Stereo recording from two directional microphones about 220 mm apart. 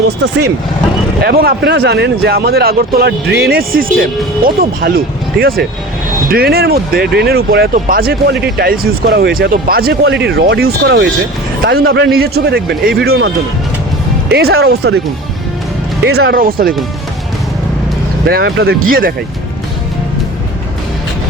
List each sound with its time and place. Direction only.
1.2 s speech: 45° right (ahead or behind)
13.1 s speech: 60° right (ahead or behind)
14.3 s speech: 45° right (ahead or behind)
16.0 s speech: 45° right (ahead or behind)
18.3 s speech: 45° right (ahead or behind)